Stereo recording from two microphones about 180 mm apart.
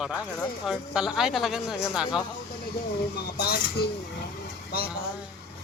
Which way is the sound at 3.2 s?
60° left (ahead or behind).